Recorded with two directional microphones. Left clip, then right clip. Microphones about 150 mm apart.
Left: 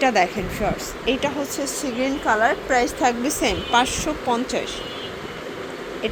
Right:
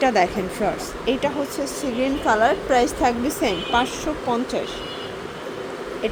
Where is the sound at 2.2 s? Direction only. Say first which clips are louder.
Right 1 dB; 20° right (ahead or behind).